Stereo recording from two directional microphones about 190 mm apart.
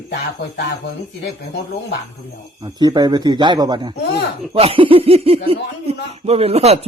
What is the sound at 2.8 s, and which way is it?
Speech, 20° right (ahead or behind).